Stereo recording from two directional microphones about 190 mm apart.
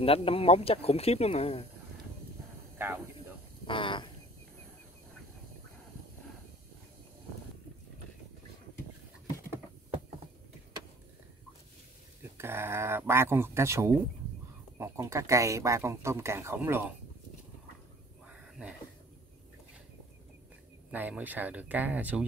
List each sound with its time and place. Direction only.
0.0 s speech: 30° left (ahead or behind)
2.8 s snake: 10° right (ahead or behind)
3.6 s a sound: 25° left (ahead or behind)
12.2 s speech: 10° right (ahead or behind)
18.3 s a sound: 5° right (ahead or behind)
20.9 s speech: 10° right (ahead or behind)